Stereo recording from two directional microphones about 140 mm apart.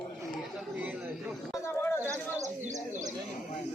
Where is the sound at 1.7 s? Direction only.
20° left (ahead or behind).